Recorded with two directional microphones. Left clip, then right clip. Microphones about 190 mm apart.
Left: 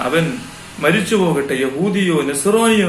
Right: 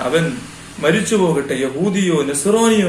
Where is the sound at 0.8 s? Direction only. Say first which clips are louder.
Even; 10° right (ahead or behind).